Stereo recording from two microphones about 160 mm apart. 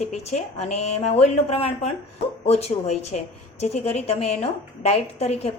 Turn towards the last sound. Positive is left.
turn(degrees=40)  # may be behind; listen again after turning